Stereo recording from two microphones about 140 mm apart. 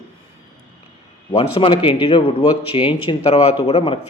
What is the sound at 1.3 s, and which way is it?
Speech, 40° left (ahead or behind).